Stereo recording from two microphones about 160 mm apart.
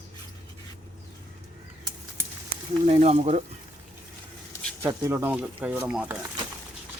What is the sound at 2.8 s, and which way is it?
Speech, 40° right (ahead or behind).